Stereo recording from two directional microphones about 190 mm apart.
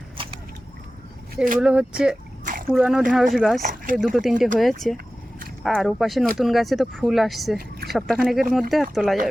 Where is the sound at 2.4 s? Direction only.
45° right (ahead or behind).